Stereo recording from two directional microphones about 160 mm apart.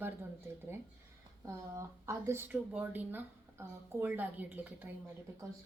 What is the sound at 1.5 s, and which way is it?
Speech, 15° right (ahead or behind).